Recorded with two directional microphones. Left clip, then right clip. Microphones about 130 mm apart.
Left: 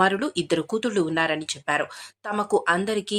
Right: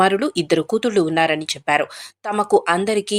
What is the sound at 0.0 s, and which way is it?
Speech, 20° right (ahead or behind).